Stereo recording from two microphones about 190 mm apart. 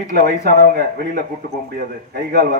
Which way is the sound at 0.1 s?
50° right (ahead or behind).